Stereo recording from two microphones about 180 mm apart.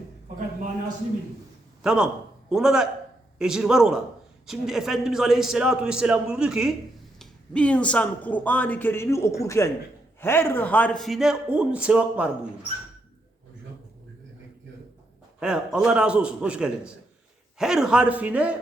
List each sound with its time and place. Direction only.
1.8 s a man's voice: 5° right (ahead or behind)
15.4 s a man's voice: 5° right (ahead or behind)